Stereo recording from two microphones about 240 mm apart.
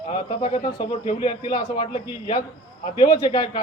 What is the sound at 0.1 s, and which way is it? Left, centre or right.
Speech, left.